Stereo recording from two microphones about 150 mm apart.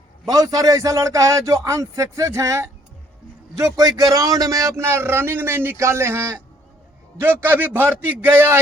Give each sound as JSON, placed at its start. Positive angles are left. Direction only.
{"t": 0.3, "sound": "a man's voice", "side_deg": -25}